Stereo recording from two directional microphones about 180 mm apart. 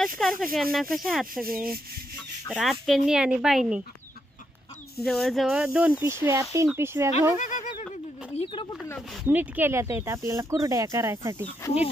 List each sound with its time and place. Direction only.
0.2 s speech: centre (ahead or behind)
5.0 s speech: centre (ahead or behind)
7.3 s a sound: 45° left (ahead or behind)
7.9 s a sound: 30° left (ahead or behind)
9.1 s speech: 5° right (ahead or behind)
11.6 s speech: 20° left (ahead or behind)